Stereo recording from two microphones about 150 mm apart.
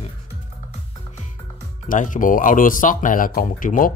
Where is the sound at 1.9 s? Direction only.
60° left (ahead or behind).